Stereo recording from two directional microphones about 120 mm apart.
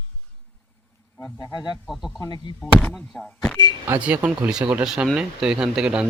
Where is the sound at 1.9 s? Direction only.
Centre (ahead or behind).